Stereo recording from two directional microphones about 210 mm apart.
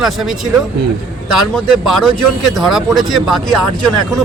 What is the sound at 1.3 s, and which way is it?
Speech, centre (ahead or behind).